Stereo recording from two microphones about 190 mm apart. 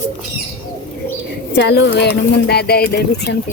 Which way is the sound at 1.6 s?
70° left (ahead or behind).